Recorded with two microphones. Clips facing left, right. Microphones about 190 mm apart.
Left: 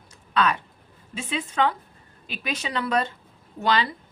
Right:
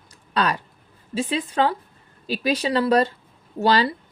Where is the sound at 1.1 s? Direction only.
35° right (ahead or behind).